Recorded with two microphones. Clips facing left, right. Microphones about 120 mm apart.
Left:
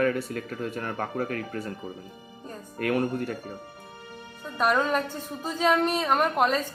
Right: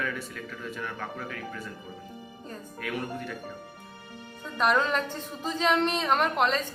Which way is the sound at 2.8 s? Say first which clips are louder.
Left 8 dB; 50° left (ahead or behind).